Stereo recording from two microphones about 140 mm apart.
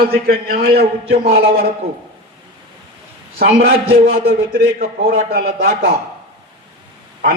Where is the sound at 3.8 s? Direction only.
90° right.